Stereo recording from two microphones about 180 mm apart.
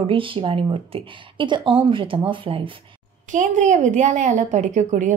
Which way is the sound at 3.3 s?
45° right (ahead or behind).